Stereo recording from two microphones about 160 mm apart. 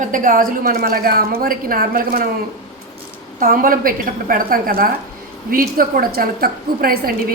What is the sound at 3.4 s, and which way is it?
A woman's voice, 60° right (ahead or behind).